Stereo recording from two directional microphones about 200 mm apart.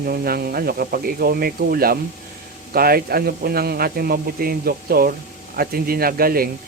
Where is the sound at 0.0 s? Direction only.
50° right (ahead or behind).